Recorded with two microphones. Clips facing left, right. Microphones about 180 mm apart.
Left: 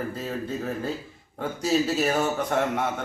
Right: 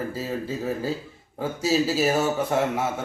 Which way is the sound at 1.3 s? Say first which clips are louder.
Right 1 dB; 5° right (ahead or behind).